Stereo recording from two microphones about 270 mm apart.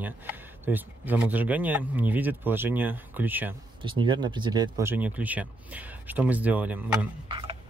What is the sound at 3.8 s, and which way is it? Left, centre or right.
Speech, centre.